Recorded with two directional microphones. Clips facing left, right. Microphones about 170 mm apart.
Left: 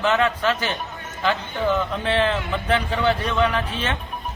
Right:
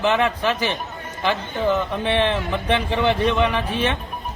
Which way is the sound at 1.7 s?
15° right (ahead or behind).